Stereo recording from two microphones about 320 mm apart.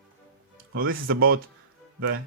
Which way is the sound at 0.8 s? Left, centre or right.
Right.